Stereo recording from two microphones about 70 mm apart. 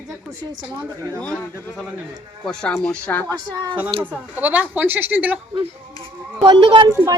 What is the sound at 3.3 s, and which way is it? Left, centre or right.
Speech, right.